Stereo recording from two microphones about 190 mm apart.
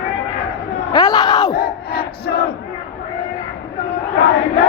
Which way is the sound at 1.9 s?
60° left (ahead or behind).